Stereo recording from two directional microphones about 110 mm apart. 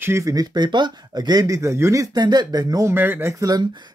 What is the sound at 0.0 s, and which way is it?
Speech, 25° right (ahead or behind).